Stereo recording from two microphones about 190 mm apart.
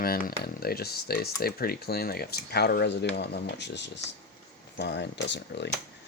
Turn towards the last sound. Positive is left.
turn(degrees=65)  # may be behind; listen again after turning